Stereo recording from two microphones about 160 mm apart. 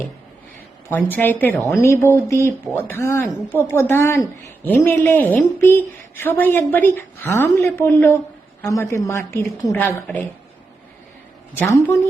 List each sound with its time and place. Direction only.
0.9 s a woman's voice: 10° left (ahead or behind)
11.5 s a woman's voice: 15° left (ahead or behind)